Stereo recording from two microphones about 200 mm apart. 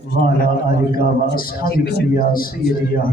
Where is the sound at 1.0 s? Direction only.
45° left (ahead or behind).